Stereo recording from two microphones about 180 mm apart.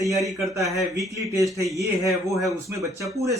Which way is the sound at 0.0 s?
20° right (ahead or behind).